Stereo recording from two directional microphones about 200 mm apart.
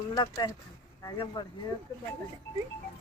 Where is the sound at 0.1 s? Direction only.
20° left (ahead or behind).